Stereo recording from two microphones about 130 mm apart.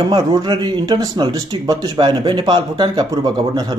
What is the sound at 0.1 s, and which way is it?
Speech, 35° right (ahead or behind).